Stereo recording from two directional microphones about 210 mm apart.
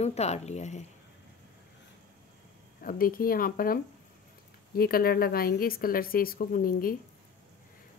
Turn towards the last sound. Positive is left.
turn(degrees=45)  # may be behind; listen again after turning